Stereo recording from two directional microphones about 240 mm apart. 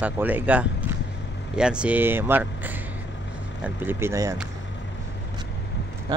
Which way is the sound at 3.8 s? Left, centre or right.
Centre.